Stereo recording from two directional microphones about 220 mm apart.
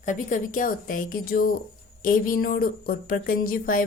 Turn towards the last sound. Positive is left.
turn(degrees=40)  # may be behind; listen again after turning